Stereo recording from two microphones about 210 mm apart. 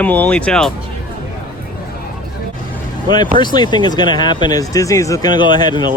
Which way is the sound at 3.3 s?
20° left (ahead or behind).